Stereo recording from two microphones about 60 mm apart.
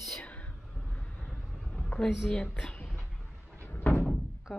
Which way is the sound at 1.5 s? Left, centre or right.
Centre.